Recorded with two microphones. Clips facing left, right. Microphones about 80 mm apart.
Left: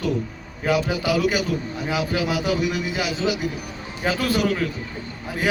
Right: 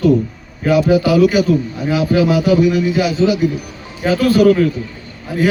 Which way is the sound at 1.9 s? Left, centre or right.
Centre.